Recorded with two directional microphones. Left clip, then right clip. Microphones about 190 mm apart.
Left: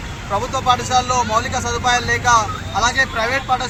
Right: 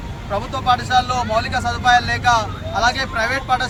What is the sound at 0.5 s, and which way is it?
Speech, 25° right (ahead or behind).